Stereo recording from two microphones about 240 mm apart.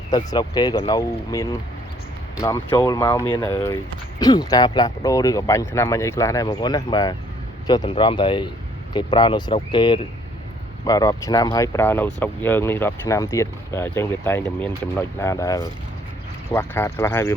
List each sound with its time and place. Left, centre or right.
0.1 s speech: centre